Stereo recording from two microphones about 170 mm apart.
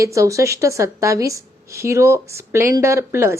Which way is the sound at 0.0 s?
20° right (ahead or behind).